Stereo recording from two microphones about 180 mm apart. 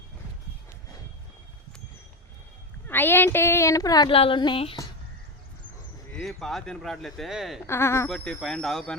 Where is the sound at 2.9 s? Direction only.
10° left (ahead or behind); by 4.8 s 30° left (ahead or behind).